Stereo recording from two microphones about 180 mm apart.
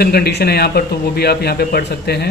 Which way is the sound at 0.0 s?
60° left (ahead or behind).